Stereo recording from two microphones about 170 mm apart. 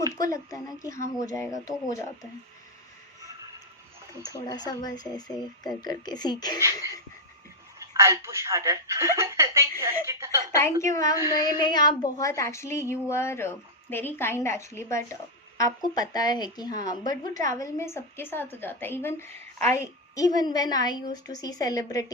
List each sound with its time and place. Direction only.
0.3 s a woman's voice: 20° left (ahead or behind)
4.3 s a woman's voice: 25° left (ahead or behind)
7.8 s speech: 15° right (ahead or behind)
10.5 s a woman's voice: 15° left (ahead or behind)